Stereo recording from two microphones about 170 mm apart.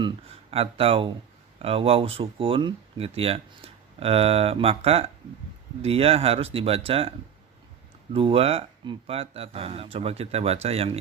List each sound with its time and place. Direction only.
0.0 s speech: 35° right (ahead or behind)
8.1 s speech: 35° right (ahead or behind)